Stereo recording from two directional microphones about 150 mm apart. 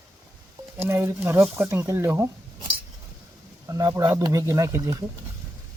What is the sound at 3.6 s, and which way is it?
Speech, 20° right (ahead or behind).